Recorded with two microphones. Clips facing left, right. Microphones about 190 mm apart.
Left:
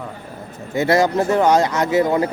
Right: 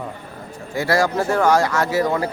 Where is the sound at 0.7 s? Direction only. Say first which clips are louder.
Left 3 dB; 20° left (ahead or behind).